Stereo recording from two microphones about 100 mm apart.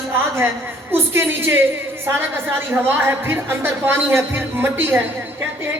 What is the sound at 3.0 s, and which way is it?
Speech, 20° right (ahead or behind).